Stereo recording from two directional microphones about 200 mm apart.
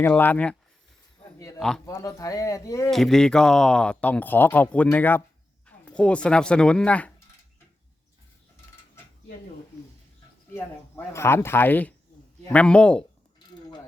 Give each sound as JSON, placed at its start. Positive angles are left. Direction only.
{"t": 0.0, "sound": "speech", "side_deg": 10}
{"t": 1.5, "sound": "speech", "side_deg": 0}
{"t": 1.9, "sound": "speech", "side_deg": 15}
{"t": 2.9, "sound": "speech", "side_deg": 0}
{"t": 10.5, "sound": "speech", "side_deg": 15}